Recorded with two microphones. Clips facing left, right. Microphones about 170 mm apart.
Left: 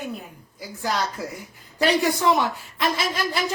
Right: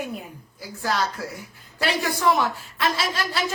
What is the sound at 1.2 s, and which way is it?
A woman's voice, 20° left (ahead or behind).